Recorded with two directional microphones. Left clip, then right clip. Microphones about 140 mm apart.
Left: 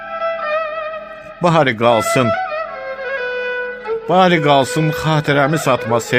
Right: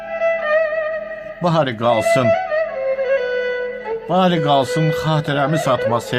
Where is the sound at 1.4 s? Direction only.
40° left (ahead or behind).